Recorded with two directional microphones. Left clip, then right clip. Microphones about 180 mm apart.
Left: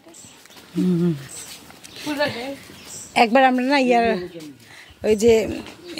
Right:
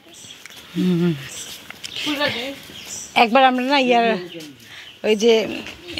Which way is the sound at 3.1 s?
25° left (ahead or behind).